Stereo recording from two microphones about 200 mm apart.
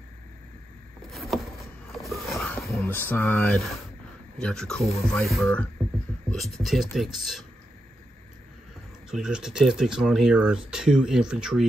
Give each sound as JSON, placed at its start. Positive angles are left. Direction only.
{"t": 1.1, "sound": "vehicle", "side_deg": 0}
{"t": 2.3, "sound": "speech", "side_deg": 5}
{"t": 9.1, "sound": "speech", "side_deg": -5}